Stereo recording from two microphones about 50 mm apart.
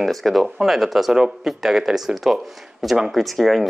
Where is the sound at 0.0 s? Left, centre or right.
Centre.